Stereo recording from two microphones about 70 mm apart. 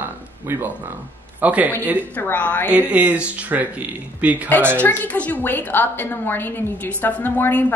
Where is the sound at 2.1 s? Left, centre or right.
Left.